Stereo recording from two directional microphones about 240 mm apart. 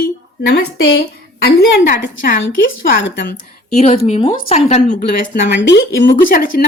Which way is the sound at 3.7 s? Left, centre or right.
Left.